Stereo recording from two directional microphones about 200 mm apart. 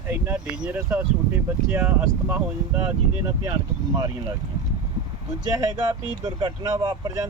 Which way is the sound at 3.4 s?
20° right (ahead or behind).